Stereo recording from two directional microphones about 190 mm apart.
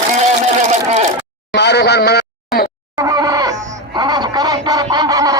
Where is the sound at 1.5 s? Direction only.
60° left (ahead or behind).